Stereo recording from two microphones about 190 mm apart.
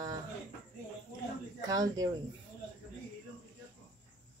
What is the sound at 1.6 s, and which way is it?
Speech, 20° right (ahead or behind).